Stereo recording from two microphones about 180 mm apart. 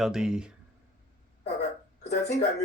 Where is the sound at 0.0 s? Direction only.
5° right (ahead or behind).